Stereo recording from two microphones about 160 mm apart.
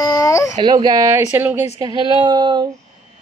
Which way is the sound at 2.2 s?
25° right (ahead or behind).